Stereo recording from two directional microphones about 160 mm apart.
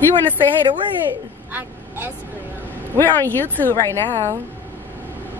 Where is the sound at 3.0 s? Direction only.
10° left (ahead or behind).